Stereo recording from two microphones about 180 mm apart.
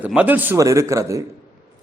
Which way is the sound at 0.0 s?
10° right (ahead or behind).